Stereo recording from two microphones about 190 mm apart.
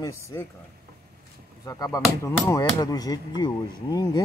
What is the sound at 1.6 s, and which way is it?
Speech, 20° left (ahead or behind).